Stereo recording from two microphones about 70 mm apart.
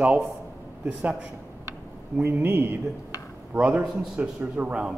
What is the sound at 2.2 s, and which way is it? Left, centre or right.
Speech, right.